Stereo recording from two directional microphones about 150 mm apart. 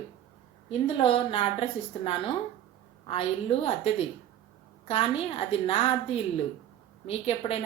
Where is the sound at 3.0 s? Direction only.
40° left (ahead or behind).